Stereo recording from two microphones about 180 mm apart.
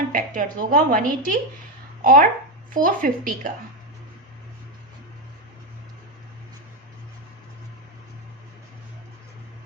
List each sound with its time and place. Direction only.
0.1 s a woman's voice: 50° right (ahead or behind)